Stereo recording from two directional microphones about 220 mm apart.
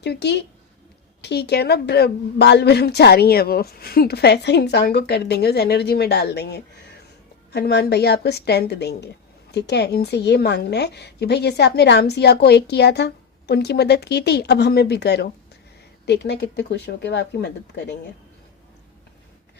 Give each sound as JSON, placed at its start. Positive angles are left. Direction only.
{"t": 0.0, "sound": "a woman's voice", "side_deg": 50}